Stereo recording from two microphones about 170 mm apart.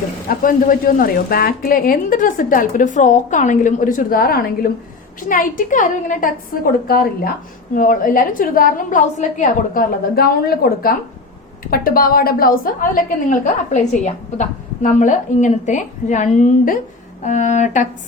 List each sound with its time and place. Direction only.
0.3 s a woman's voice: 55° left (ahead or behind)
13.4 s a woman's voice: 45° left (ahead or behind)